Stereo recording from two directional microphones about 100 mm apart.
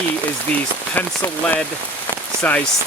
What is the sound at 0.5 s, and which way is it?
Speech, 20° left (ahead or behind).